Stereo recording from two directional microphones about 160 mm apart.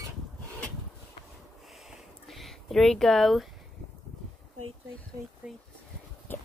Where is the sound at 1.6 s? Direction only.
Centre (ahead or behind).